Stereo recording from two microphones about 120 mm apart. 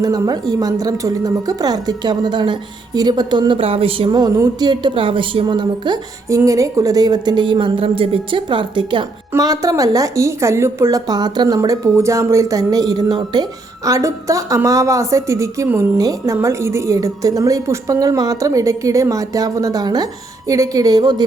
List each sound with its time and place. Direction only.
0.0 s speech: 30° right (ahead or behind); by 4.1 s 50° right (ahead or behind)
4.1 s speech: 30° right (ahead or behind)
6.2 s speech: 25° right (ahead or behind); by 9.0 s 45° right (ahead or behind)
9.3 s a woman's voice: 30° right (ahead or behind)